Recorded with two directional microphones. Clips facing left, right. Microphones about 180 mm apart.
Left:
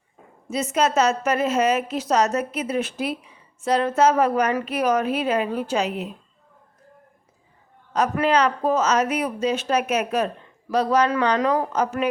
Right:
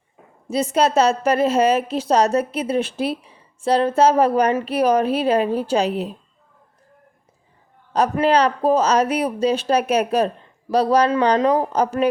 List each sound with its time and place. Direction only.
0.4 s a woman's voice: 30° right (ahead or behind)
7.9 s a woman's voice: 30° right (ahead or behind)